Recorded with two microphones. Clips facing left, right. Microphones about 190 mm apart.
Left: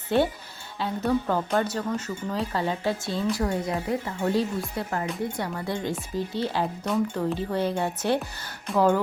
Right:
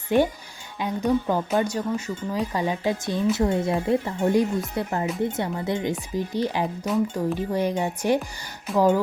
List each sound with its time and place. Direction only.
0.1 s speech: 15° right (ahead or behind)
4.2 s speech: 15° right (ahead or behind)